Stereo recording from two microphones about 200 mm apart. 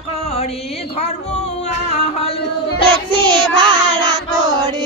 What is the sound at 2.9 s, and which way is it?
Child singing, 20° right (ahead or behind).